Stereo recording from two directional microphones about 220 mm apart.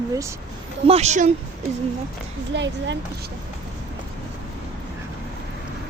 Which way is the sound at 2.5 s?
55° right (ahead or behind).